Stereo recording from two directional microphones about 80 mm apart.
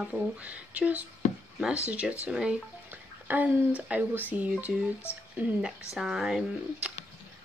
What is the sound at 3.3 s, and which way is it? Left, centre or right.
Speech, right.